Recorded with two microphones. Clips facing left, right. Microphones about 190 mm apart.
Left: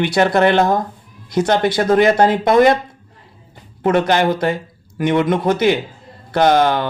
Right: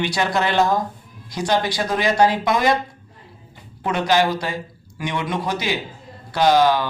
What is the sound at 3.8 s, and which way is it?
Speech, 50° left (ahead or behind).